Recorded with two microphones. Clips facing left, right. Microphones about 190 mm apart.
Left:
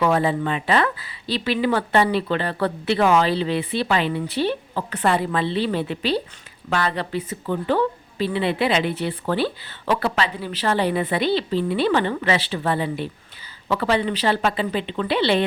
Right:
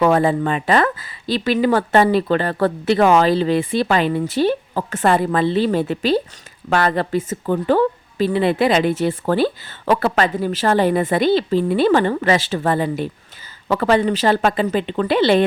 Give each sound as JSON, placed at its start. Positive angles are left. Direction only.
{"t": 0.0, "sound": "a woman's voice", "side_deg": -45}